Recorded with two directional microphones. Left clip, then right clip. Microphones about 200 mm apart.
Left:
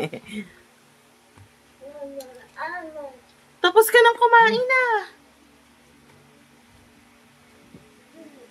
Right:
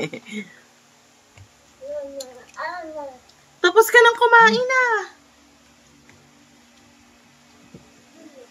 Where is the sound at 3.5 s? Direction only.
10° left (ahead or behind).